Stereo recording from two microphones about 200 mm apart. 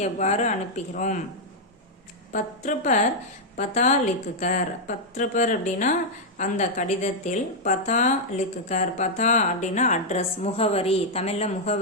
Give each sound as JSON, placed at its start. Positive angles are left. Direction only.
{"t": 0.0, "sound": "speech", "side_deg": 35}
{"t": 2.3, "sound": "speech", "side_deg": 40}